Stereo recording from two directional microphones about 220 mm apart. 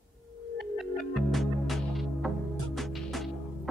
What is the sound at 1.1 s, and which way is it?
Music, centre (ahead or behind).